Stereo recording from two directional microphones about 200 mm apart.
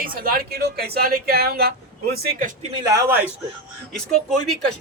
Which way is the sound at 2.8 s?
15° right (ahead or behind).